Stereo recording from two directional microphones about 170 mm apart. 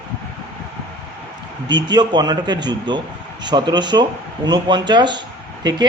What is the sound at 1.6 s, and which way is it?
A man's voice, 25° right (ahead or behind).